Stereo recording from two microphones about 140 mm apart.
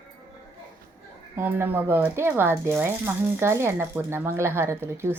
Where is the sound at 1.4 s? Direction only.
15° right (ahead or behind).